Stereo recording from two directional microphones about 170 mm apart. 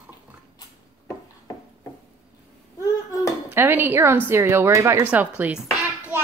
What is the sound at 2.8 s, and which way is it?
Clapping, 20° left (ahead or behind).